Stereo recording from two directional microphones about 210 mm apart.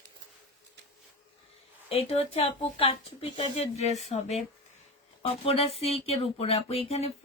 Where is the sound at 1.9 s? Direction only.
30° left (ahead or behind).